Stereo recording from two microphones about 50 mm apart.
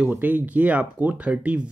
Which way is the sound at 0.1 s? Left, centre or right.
Right.